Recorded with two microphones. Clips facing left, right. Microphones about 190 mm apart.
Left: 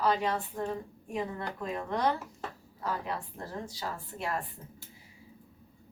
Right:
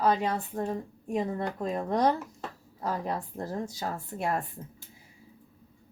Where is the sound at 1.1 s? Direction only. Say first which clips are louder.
Right 5 dB; 40° right (ahead or behind).